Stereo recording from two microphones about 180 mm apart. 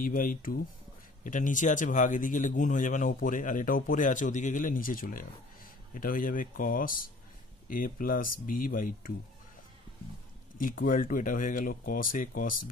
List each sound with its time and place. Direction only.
0.0 s speech: 50° left (ahead or behind)
10.6 s speech: 50° left (ahead or behind)